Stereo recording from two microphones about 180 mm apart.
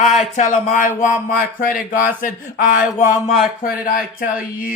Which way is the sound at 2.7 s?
45° left (ahead or behind).